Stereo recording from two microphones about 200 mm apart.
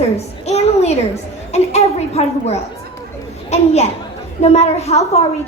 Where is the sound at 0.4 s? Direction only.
30° left (ahead or behind).